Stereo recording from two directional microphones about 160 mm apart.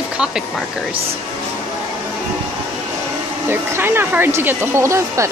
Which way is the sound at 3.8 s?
15° right (ahead or behind).